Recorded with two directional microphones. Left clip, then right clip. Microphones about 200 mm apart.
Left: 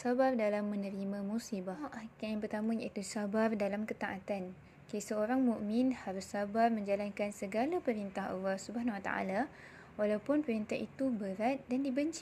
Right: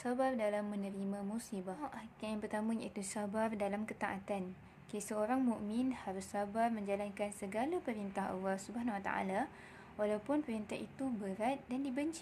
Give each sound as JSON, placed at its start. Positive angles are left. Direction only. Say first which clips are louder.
{"t": 0.0, "sound": "a woman's voice", "louder": "left 4 dB", "side_deg": 15}